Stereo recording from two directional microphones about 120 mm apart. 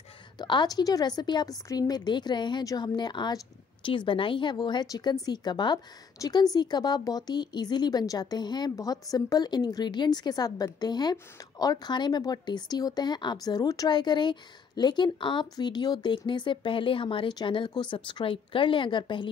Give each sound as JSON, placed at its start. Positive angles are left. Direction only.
{"t": 0.4, "sound": "a woman's voice", "side_deg": 35}